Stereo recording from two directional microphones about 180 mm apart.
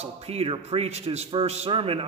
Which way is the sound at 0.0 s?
35° right (ahead or behind).